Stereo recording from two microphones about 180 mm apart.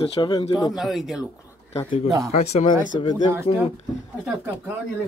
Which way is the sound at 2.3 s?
35° left (ahead or behind).